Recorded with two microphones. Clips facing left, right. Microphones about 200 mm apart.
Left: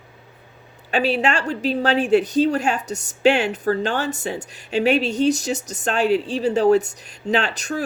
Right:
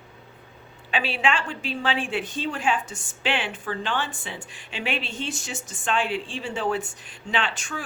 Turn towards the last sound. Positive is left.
turn(degrees=40)  # may be behind; listen again after turning